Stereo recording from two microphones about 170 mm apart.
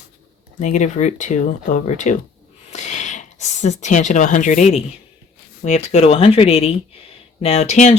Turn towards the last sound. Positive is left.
turn(degrees=40)  # may be behind; listen again after turning